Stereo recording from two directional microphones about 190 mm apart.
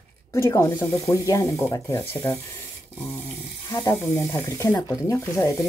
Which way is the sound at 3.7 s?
15° left (ahead or behind).